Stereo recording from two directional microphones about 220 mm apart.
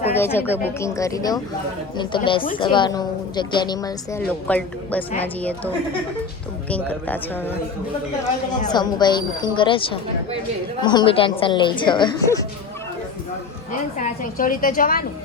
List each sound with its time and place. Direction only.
0.2 s a woman's voice: 10° left (ahead or behind)
8.7 s a woman's voice: 20° left (ahead or behind)
14.0 s a woman's voice: 40° left (ahead or behind)